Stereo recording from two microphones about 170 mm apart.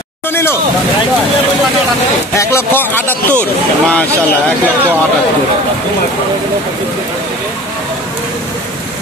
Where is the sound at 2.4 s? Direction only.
15° left (ahead or behind).